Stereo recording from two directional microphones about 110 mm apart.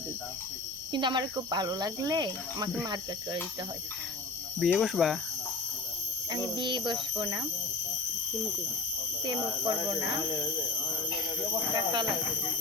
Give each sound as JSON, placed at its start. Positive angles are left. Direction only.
{"t": 0.9, "sound": "speech", "side_deg": -45}
{"t": 4.6, "sound": "speech", "side_deg": 0}
{"t": 6.3, "sound": "speech", "side_deg": -45}
{"t": 9.2, "sound": "speech", "side_deg": -45}
{"t": 11.7, "sound": "speech", "side_deg": -40}